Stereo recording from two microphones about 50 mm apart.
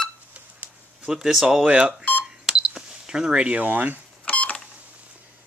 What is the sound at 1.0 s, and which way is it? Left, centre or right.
Speech, centre.